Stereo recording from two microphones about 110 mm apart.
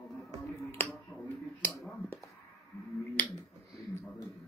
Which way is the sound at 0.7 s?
20° left (ahead or behind).